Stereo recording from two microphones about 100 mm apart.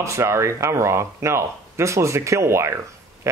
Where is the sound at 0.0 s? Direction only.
30° right (ahead or behind).